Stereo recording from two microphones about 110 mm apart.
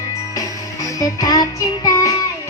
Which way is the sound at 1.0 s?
35° left (ahead or behind).